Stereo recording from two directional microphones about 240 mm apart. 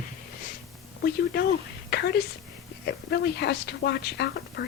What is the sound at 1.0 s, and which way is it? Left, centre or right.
Speech, left.